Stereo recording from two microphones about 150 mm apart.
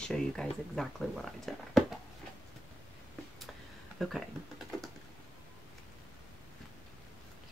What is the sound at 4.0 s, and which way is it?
Speech, centre (ahead or behind).